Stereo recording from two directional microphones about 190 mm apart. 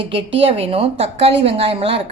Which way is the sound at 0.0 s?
30° right (ahead or behind).